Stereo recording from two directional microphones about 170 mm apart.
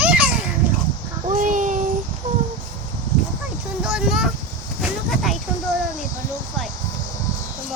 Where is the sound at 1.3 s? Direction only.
50° right (ahead or behind).